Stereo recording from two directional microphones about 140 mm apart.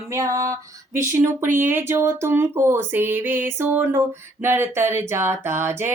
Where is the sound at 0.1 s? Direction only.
25° right (ahead or behind).